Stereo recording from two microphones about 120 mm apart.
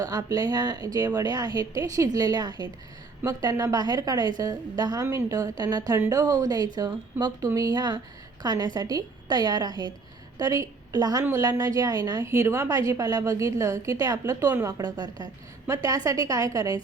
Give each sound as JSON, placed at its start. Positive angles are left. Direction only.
{"t": 0.0, "sound": "a woman's voice", "side_deg": -30}